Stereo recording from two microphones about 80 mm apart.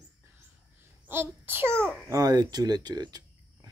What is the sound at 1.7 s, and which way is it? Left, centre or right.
Babbling, centre.